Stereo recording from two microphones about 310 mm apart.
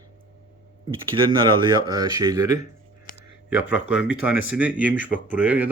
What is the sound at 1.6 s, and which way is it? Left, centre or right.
Speech, centre.